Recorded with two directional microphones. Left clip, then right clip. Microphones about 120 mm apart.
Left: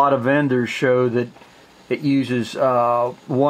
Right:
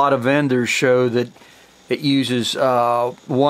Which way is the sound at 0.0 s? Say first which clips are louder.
Even; 40° right (ahead or behind).